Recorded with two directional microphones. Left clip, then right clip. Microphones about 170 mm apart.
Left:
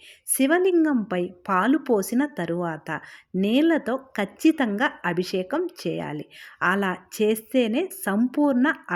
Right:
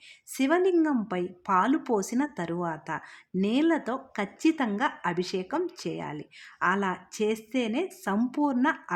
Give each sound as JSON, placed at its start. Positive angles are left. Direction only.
{"t": 0.3, "sound": "speech", "side_deg": 15}